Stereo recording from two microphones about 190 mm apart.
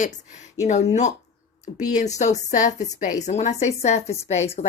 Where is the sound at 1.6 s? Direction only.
40° left (ahead or behind).